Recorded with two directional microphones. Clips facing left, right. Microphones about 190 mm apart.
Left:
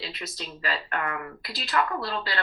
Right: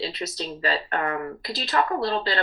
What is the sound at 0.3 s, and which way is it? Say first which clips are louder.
Speech: right 5 dB; 30° right (ahead or behind).